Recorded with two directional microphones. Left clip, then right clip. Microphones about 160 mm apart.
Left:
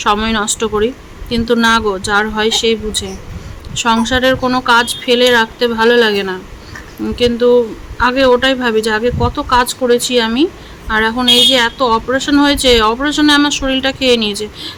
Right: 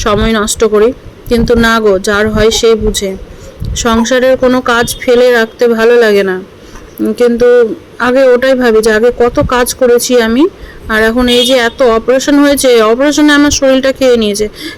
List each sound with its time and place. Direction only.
0.0 s a man's voice: 20° right (ahead or behind)